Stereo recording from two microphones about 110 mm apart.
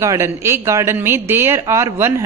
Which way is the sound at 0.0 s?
25° right (ahead or behind).